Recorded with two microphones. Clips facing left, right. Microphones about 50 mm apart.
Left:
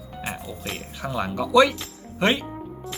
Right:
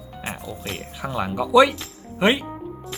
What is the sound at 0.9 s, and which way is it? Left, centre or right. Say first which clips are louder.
Speech: right 2 dB; centre.